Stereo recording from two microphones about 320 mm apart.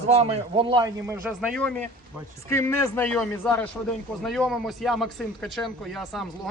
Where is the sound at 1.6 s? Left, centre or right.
Centre.